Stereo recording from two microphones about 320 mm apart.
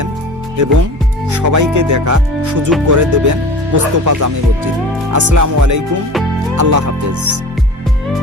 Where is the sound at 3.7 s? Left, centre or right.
Right.